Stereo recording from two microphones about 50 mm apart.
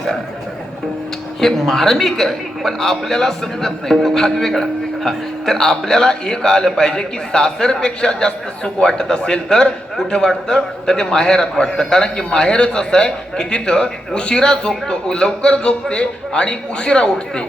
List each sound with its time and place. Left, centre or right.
1.4 s a man's voice: centre